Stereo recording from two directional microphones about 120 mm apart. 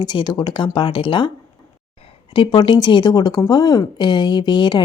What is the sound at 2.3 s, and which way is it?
Speech, 40° left (ahead or behind).